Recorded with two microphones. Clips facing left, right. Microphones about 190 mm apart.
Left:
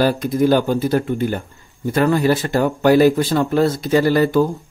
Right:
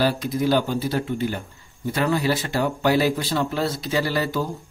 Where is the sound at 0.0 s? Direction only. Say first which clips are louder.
Left 6 dB; 50° left (ahead or behind).